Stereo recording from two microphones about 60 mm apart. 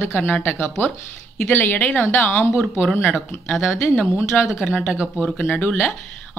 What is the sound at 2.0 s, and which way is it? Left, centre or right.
Speech, left.